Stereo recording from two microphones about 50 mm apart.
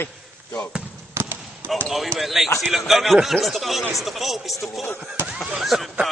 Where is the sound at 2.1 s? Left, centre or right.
Centre.